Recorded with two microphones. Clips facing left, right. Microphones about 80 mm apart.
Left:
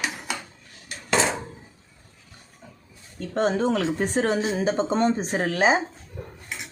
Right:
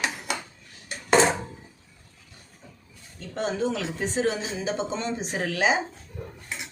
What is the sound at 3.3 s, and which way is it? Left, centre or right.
Speech, left.